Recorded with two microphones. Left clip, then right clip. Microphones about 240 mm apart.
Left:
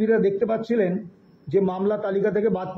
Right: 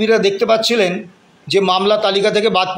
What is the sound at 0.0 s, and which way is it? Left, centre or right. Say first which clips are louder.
A man's voice: right 7 dB; right.